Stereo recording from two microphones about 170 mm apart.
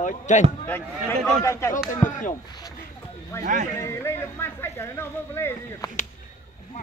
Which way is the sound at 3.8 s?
15° left (ahead or behind).